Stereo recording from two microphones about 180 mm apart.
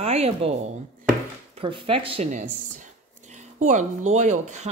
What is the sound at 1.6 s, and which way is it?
Speech, 30° right (ahead or behind).